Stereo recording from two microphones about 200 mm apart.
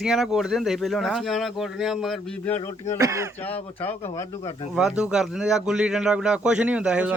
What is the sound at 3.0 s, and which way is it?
Speech, 15° right (ahead or behind).